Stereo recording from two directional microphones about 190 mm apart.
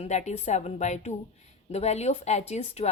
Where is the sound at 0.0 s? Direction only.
35° left (ahead or behind).